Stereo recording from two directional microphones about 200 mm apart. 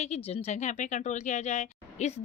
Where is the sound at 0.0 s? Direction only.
30° left (ahead or behind).